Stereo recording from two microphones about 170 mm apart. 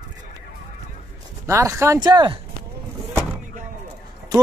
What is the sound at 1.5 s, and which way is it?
Speech, 15° right (ahead or behind).